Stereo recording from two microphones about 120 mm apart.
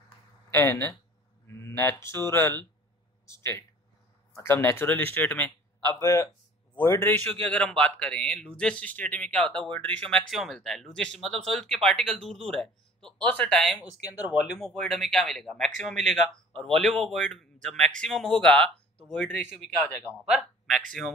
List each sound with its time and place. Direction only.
0.5 s a man's voice: 20° left (ahead or behind); by 20.8 s centre (ahead or behind)